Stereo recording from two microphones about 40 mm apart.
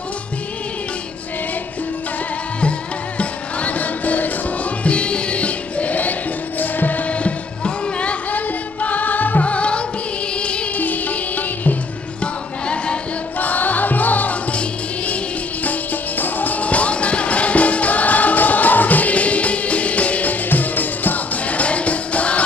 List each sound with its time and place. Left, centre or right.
3.2 s music: left
4.8 s music: left
8.3 s music: left
10.8 s music: left
12.2 s music: left
13.4 s music: left
14.5 s music: left
15.6 s music: left
20.4 s music: left